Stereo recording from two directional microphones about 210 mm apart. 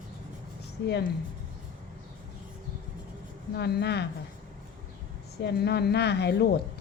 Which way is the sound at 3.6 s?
50° left (ahead or behind).